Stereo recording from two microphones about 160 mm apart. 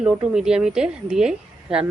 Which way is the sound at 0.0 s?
5° right (ahead or behind).